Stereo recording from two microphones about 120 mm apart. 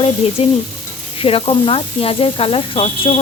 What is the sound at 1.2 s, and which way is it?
Speech, 50° left (ahead or behind).